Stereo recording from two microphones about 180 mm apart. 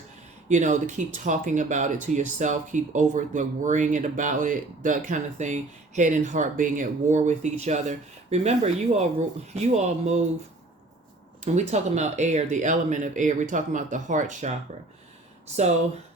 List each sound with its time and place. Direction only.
0.4 s speech: 40° right (ahead or behind)
11.4 s speech: 40° right (ahead or behind)